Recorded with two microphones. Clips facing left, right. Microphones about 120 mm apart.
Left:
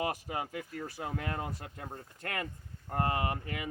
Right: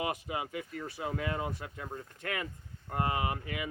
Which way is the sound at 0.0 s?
45° left (ahead or behind).